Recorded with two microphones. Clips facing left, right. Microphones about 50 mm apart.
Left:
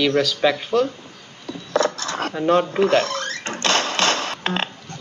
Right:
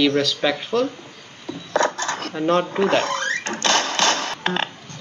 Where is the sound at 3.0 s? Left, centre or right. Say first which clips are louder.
Right 1 dB; right.